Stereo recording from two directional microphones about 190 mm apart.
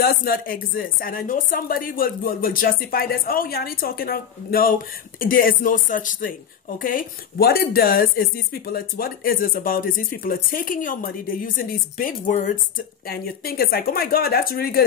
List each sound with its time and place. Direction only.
0.0 s speech: 50° left (ahead or behind)